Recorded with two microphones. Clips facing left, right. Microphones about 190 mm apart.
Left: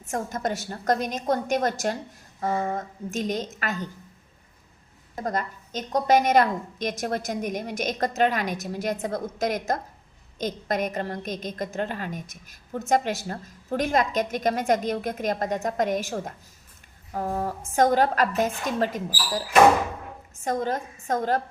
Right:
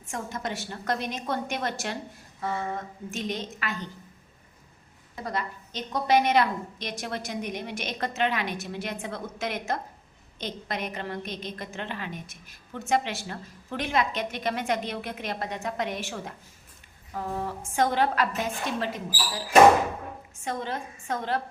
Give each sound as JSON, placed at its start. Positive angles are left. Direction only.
{"t": 0.1, "sound": "a woman's voice", "side_deg": 45}
{"t": 5.1, "sound": "a woman's voice", "side_deg": 45}
{"t": 17.1, "sound": "a sound", "side_deg": 45}
{"t": 17.7, "sound": "a woman's voice", "side_deg": 45}
{"t": 20.4, "sound": "a woman's voice", "side_deg": 45}